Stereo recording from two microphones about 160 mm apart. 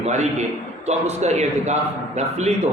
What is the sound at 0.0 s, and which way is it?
A man's voice, 45° right (ahead or behind).